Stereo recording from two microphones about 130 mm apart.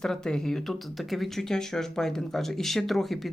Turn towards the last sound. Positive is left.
turn(degrees=0)  # may be behind; listen again after turning